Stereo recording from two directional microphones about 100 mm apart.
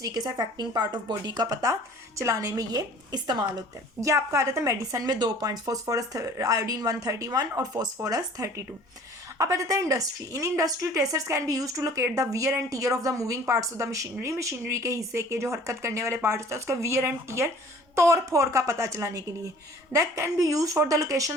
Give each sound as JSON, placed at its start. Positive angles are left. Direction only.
{"t": 0.0, "sound": "a woman's voice", "side_deg": -40}
{"t": 2.7, "sound": "speech", "side_deg": -45}
{"t": 4.0, "sound": "a woman's voice", "side_deg": -30}